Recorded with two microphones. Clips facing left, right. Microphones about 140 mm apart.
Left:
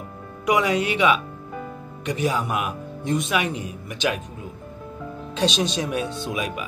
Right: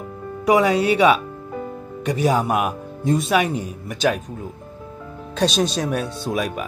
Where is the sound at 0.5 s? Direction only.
35° right (ahead or behind).